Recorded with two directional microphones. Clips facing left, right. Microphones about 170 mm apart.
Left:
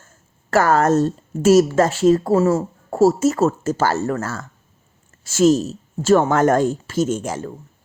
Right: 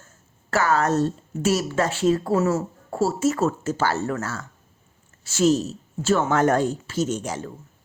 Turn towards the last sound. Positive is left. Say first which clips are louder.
# left 4 dB
turn(degrees=50)  # may be behind; listen again after turning